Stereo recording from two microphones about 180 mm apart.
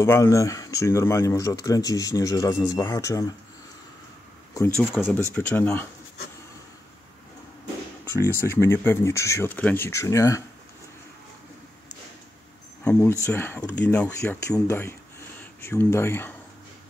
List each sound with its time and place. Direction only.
0.0 s speech: 15° left (ahead or behind)
4.7 s speech: 10° left (ahead or behind)
8.0 s speech: 15° left (ahead or behind)
13.2 s speech: 10° left (ahead or behind)